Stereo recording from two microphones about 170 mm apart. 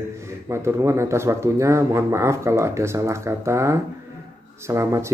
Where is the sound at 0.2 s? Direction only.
15° right (ahead or behind).